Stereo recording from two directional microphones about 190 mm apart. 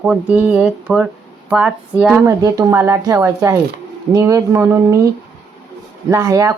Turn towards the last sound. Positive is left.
turn(degrees=-15)  # may be behind; listen again after turning